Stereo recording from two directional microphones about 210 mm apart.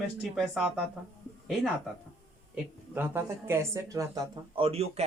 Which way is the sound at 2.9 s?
10° right (ahead or behind).